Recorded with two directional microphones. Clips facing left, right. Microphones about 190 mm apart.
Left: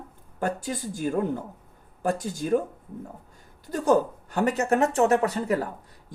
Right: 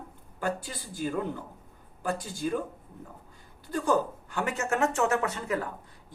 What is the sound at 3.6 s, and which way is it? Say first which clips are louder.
Speech: left 5 dB; 40° left (ahead or behind).